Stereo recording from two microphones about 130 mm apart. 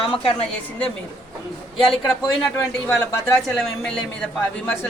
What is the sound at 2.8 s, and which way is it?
Speech, 20° left (ahead or behind).